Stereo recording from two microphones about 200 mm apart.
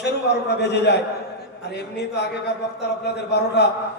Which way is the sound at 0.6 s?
55° left (ahead or behind).